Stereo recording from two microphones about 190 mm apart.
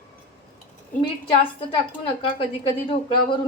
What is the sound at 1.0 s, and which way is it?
Speech, 30° left (ahead or behind).